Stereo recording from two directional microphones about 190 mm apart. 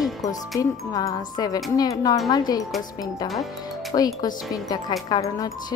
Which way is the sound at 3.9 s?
20° left (ahead or behind).